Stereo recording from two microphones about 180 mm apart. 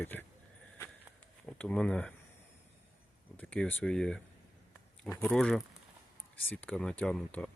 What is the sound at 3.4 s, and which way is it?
Speech, 10° left (ahead or behind).